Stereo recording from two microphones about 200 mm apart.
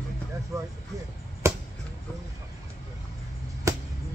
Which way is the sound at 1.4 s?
15° right (ahead or behind).